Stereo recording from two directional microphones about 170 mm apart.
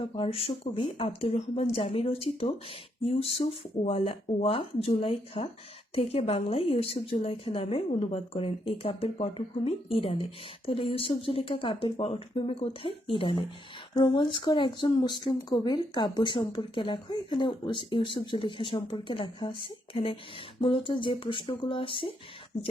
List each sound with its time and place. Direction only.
0.2 s a woman's voice: 35° left (ahead or behind)